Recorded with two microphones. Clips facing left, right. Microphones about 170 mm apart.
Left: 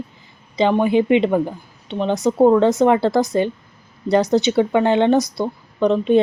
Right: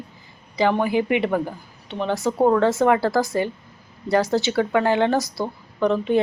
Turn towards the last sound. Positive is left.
turn(degrees=20)  # may be behind; listen again after turning